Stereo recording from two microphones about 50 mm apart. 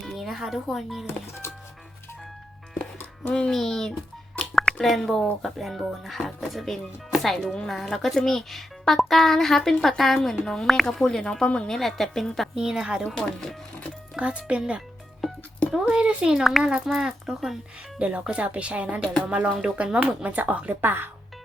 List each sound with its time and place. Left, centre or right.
0.0 s speech: centre
3.5 s a woman's voice: centre
11.8 s a woman's voice: centre
12.5 s speech: centre
13.1 s speech: centre
14.2 s speech: right
15.9 s speech: centre
16.4 s a woman's voice: centre
18.0 s speech: right